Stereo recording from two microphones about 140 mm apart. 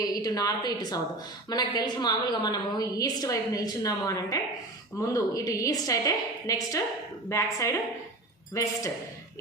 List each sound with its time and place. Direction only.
0.0 s a woman's voice: 30° left (ahead or behind)